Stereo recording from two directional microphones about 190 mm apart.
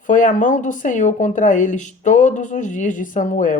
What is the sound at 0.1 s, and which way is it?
A woman's voice, 45° left (ahead or behind).